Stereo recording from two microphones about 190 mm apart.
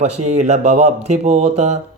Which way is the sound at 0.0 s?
35° right (ahead or behind).